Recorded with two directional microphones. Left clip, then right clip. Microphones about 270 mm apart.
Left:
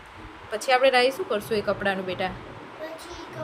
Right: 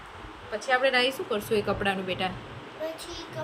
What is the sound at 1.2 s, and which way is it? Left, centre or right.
Speech, centre.